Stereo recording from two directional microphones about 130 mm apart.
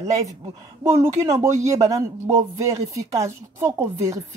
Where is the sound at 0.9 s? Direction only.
25° right (ahead or behind).